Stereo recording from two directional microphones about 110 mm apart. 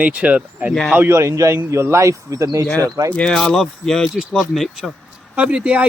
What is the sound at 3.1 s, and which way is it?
Speech, 5° left (ahead or behind).